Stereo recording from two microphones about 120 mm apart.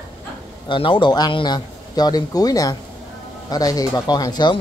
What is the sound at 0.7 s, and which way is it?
Speech, 45° left (ahead or behind).